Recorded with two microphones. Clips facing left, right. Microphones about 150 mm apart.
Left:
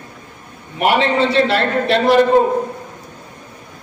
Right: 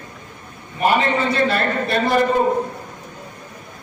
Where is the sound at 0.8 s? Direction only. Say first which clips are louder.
Left 3 dB; 90° left.